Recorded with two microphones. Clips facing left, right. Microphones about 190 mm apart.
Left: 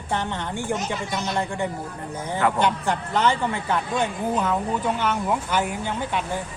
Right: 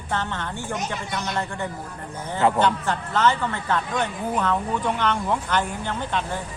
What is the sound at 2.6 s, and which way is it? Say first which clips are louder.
Speech: even; 15° left (ahead or behind).